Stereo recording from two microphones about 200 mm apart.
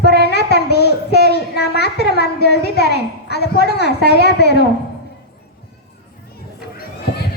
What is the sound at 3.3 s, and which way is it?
A child's voice, 55° left (ahead or behind).